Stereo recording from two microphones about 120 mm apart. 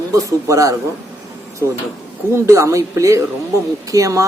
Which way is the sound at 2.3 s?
25° right (ahead or behind).